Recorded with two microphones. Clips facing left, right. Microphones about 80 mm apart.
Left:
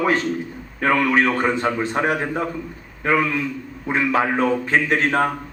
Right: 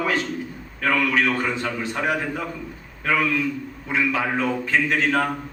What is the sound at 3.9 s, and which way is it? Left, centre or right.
A man's voice, left.